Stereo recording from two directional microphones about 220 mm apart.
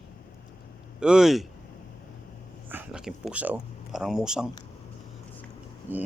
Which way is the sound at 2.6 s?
5° right (ahead or behind).